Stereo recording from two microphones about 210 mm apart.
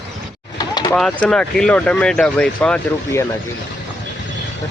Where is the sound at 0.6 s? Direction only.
20° left (ahead or behind).